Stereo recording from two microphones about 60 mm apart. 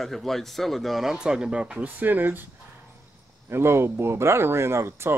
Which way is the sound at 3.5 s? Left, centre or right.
Right.